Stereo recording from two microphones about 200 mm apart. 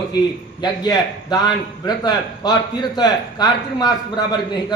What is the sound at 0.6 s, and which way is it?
A man's voice, 20° left (ahead or behind).